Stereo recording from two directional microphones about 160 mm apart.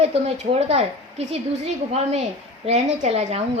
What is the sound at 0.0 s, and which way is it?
A woman's voice, 40° right (ahead or behind).